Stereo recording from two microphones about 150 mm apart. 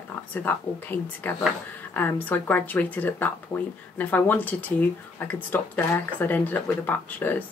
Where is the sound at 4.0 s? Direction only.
10° left (ahead or behind).